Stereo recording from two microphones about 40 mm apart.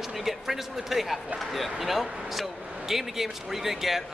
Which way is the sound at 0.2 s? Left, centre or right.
Centre.